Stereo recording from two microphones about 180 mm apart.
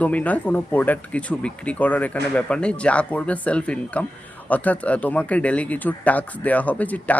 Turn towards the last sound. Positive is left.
turn(degrees=10)  # may be behind; listen again after turning